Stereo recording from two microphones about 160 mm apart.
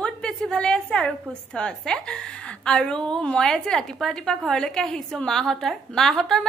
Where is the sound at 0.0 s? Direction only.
5° left (ahead or behind).